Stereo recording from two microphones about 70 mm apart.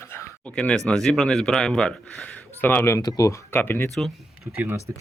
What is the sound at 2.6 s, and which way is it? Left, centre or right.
Speech, left.